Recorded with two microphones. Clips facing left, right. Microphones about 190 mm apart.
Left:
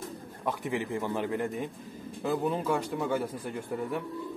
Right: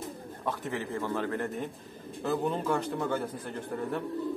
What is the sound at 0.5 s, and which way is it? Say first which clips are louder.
A man's voice: left 2 dB; 15° left (ahead or behind).